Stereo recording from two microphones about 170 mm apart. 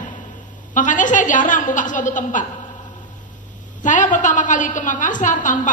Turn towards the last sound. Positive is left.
turn(degrees=50)  # may be behind; listen again after turning